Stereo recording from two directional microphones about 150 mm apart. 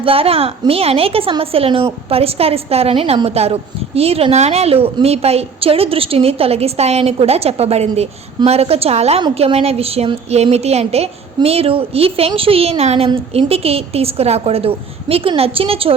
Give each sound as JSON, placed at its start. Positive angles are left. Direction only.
{"t": 0.0, "sound": "a woman's voice", "side_deg": -40}